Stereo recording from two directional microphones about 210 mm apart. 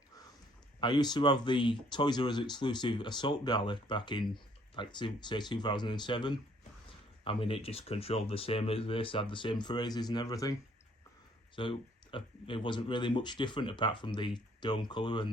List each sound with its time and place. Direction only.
0.8 s speech: 20° left (ahead or behind)
11.5 s speech: 25° left (ahead or behind)